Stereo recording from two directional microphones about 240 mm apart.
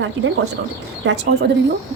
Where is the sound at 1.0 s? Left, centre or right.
Right.